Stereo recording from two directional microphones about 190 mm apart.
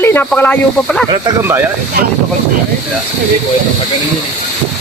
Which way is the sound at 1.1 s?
20° right (ahead or behind).